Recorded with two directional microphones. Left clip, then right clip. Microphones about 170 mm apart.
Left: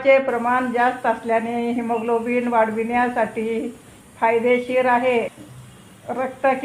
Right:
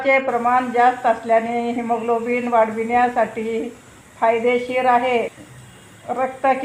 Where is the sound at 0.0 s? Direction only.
25° left (ahead or behind).